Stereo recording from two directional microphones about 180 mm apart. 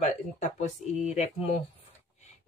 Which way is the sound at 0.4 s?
40° left (ahead or behind).